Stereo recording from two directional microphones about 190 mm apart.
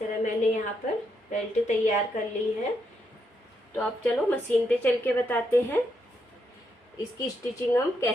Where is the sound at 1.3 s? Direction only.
40° left (ahead or behind).